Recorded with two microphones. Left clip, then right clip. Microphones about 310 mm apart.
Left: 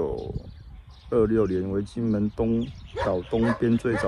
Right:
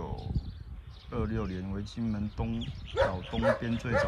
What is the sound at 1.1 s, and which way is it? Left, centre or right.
Speech, left.